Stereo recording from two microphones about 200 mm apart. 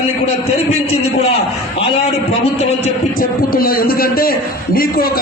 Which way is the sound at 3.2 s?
45° left (ahead or behind).